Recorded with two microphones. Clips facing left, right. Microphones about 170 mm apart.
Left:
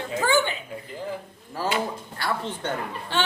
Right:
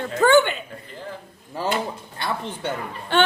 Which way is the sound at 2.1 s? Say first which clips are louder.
Right 1 dB; 20° right (ahead or behind).